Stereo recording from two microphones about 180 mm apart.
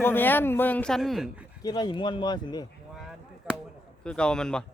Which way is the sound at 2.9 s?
Centre (ahead or behind).